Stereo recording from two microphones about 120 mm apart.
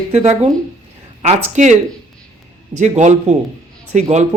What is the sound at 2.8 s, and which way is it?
Speech, 80° right.